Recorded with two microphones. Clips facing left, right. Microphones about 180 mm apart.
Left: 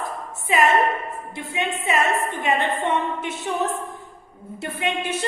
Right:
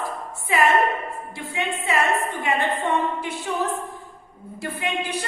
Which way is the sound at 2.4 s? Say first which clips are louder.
Left 1 dB; 20° left (ahead or behind).